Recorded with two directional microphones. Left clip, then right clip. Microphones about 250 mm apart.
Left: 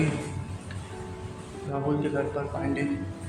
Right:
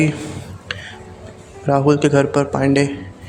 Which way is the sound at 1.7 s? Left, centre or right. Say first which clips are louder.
Right 14 dB; right.